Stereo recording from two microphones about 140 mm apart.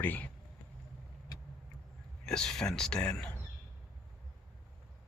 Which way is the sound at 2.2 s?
5° left (ahead or behind).